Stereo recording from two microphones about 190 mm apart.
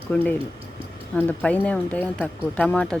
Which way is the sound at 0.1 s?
10° left (ahead or behind).